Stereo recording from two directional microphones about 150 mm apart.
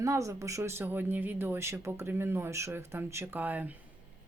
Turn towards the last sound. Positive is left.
turn(degrees=-10)  # may be behind; listen again after turning